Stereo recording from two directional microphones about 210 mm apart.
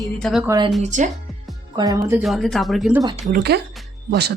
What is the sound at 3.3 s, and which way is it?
Speech, 50° right (ahead or behind).